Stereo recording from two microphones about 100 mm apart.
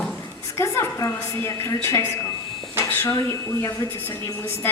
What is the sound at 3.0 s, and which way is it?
A woman's voice, 30° left (ahead or behind).